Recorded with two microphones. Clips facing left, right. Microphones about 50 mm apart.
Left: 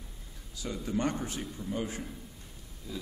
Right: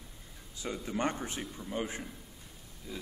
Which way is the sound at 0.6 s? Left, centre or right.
Right.